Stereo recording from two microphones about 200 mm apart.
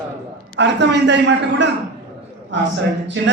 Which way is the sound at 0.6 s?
60° right (ahead or behind).